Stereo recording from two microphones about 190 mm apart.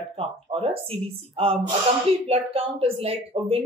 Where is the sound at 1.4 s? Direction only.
30° right (ahead or behind).